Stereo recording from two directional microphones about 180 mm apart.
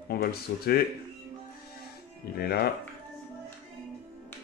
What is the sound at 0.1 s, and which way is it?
Speech, 60° left (ahead or behind).